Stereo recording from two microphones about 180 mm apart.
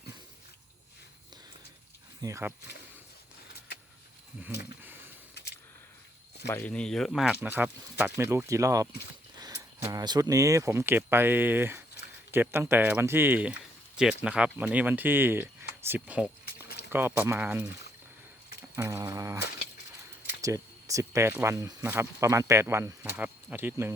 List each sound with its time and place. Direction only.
2.2 s speech: 15° right (ahead or behind)
6.5 s speech: 10° left (ahead or behind); by 8.9 s 15° right (ahead or behind)
9.4 s a sound: 15° right (ahead or behind)
9.9 s speech: 20° right (ahead or behind)
18.8 s a sound: 15° right (ahead or behind)
20.4 s speech: 20° right (ahead or behind)